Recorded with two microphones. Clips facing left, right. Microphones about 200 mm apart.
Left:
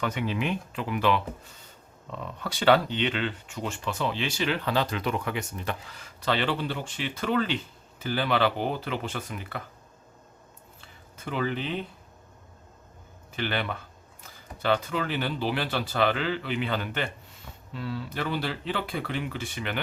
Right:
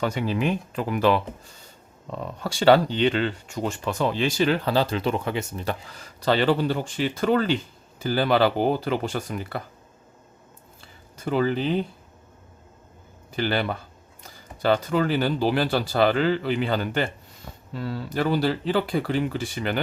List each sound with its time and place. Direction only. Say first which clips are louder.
0.0 s speech: right 4 dB; 35° right (ahead or behind)
10.8 s a sound: right 3 dB; 40° right (ahead or behind)
13.3 s speech: right 5 dB; 35° right (ahead or behind)